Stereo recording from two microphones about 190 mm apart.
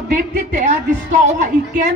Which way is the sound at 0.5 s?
40° right (ahead or behind).